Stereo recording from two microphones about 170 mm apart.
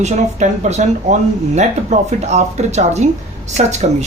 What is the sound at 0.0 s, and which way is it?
A woman's voice, 45° right (ahead or behind).